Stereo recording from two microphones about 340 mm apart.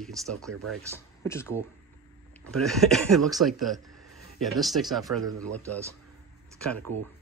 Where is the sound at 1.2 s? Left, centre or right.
Centre.